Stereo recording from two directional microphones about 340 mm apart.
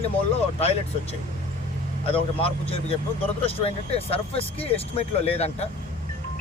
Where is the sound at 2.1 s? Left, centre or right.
Centre.